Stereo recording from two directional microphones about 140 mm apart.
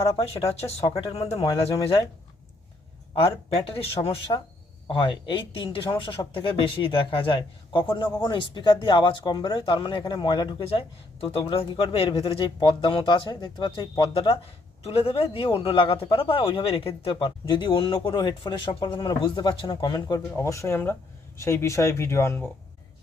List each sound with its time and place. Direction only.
0.2 s speech: 45° left (ahead or behind)
3.2 s speech: 40° left (ahead or behind)
14.1 s speech: 40° left (ahead or behind); by 22.4 s 20° left (ahead or behind)